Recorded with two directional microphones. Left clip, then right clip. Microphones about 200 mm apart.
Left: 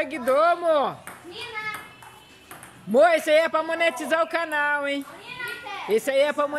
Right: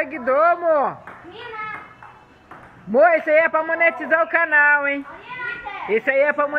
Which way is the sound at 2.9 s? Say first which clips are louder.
Right 3 dB; 30° left (ahead or behind).